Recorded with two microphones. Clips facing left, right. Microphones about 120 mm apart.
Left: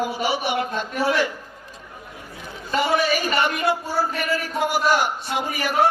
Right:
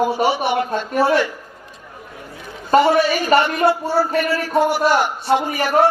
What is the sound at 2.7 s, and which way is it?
Speech, 55° right (ahead or behind).